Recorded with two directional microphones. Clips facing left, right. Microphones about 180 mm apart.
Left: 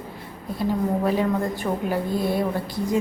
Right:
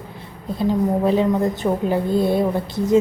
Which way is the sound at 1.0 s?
25° right (ahead or behind).